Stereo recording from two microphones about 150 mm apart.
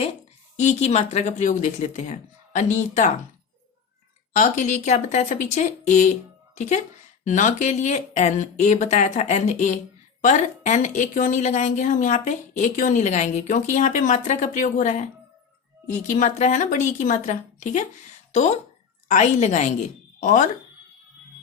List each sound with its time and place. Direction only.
0.5 s speech: 50° left (ahead or behind)
4.4 s a woman's voice: 55° left (ahead or behind)